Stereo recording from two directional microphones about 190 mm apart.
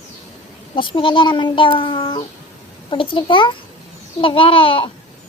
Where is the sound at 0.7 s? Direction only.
25° left (ahead or behind).